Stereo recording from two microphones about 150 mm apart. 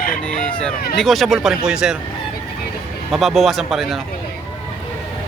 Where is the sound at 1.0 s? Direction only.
Centre (ahead or behind).